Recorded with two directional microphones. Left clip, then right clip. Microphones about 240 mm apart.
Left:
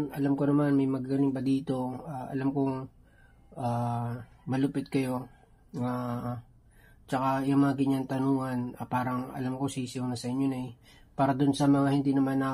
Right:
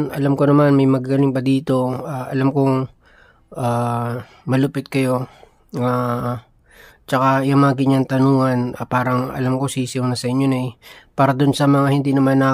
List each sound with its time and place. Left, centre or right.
0.0 s speech: right